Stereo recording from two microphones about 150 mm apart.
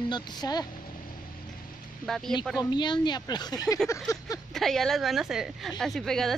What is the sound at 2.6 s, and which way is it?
Speech, 30° left (ahead or behind).